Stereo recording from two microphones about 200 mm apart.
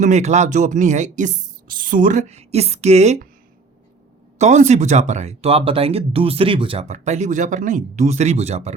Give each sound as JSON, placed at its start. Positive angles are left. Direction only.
{"t": 0.0, "sound": "speech", "side_deg": -35}
{"t": 4.4, "sound": "speech", "side_deg": -35}